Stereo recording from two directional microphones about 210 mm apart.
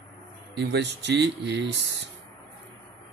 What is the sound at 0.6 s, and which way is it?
Speech, 55° right (ahead or behind).